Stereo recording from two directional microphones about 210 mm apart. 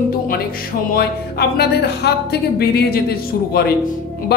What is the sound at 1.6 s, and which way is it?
Speech, 50° left (ahead or behind).